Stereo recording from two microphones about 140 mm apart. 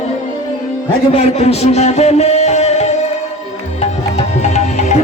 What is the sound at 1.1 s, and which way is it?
Music, 50° left (ahead or behind).